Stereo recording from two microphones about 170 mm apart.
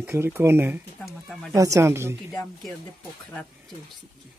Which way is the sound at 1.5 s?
20° right (ahead or behind).